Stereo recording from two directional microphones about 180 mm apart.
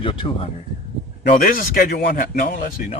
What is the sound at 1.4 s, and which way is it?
Speech, 50° left (ahead or behind).